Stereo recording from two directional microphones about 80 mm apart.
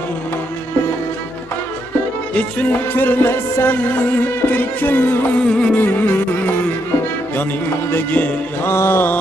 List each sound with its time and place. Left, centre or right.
2.3 s music: left
5.4 s music: centre
5.8 s music: left
7.9 s music: left